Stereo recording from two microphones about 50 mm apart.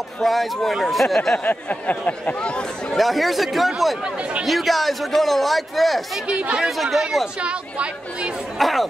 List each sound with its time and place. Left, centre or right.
0.2 s a man's voice: centre
1.4 s speech: left
3.0 s a man's voice: centre
4.0 s speech: right
4.5 s a man's voice: centre
6.2 s speech: right
6.8 s a man's voice: centre
7.3 s speech: right
8.5 s a man's voice: centre